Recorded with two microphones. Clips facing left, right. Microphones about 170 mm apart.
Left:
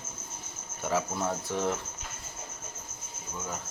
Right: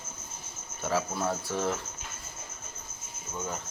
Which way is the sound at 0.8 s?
15° left (ahead or behind).